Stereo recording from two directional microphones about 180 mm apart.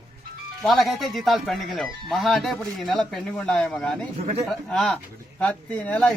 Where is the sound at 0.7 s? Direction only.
Centre (ahead or behind).